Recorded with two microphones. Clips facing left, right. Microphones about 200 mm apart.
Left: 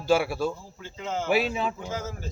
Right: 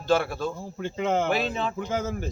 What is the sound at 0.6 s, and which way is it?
Speech, 60° right (ahead or behind).